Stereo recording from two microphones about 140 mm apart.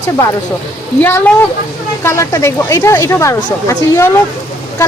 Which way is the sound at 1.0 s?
15° left (ahead or behind).